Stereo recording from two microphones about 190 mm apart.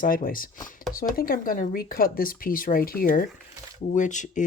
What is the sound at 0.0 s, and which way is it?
Speech, 50° left (ahead or behind).